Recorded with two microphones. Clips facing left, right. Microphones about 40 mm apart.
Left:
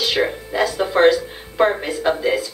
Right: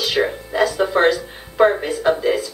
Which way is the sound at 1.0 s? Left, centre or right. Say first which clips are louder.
Left 3 dB; centre.